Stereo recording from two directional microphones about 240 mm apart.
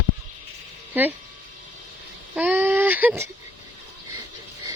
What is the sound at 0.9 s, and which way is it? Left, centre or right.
Speech, centre.